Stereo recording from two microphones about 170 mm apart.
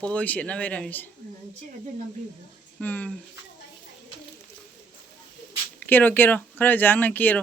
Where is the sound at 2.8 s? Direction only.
10° left (ahead or behind).